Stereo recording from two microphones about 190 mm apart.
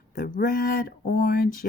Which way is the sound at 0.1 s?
45° left (ahead or behind).